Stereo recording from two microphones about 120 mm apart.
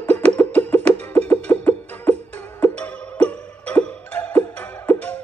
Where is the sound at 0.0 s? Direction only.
15° left (ahead or behind).